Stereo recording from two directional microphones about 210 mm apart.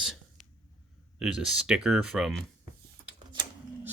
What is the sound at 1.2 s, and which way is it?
Speech, centre (ahead or behind).